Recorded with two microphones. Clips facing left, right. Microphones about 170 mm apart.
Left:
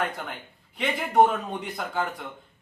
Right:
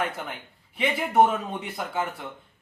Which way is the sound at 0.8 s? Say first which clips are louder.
Even; 5° right (ahead or behind).